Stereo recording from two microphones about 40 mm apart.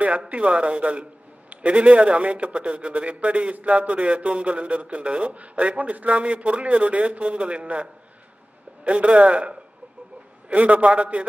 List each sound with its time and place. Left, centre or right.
0.3 s a man's voice: right